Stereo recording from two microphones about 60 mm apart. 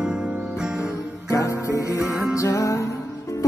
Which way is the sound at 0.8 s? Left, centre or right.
Left.